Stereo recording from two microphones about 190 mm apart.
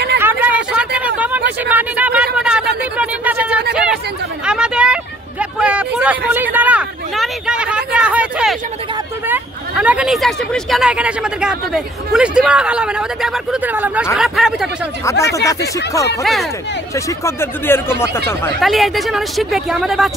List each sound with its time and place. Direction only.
0.2 s a sound: 10° right (ahead or behind)
3.7 s chatter: 5° right (ahead or behind)
4.5 s vehicle: 5° right (ahead or behind)
9.3 s speech: 5° right (ahead or behind)
15.3 s speech: 15° left (ahead or behind)
16.2 s speech: centre (ahead or behind)
16.9 s speech: 15° left (ahead or behind)
18.6 s speech: centre (ahead or behind)